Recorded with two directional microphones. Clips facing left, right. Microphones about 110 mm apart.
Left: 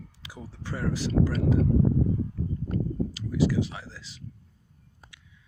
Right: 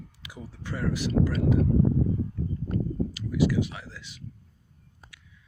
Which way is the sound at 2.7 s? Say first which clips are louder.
Right 1 dB; 35° left (ahead or behind).